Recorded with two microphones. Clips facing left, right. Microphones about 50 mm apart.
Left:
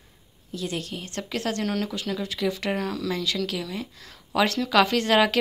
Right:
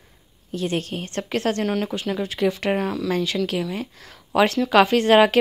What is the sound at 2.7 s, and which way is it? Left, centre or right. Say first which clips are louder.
Speech: right 5 dB; centre.